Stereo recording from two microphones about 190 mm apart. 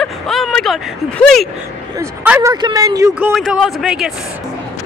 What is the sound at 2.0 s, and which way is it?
Speech, 15° right (ahead or behind).